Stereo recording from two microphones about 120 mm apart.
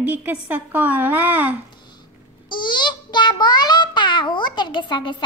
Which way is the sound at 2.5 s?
40° left (ahead or behind).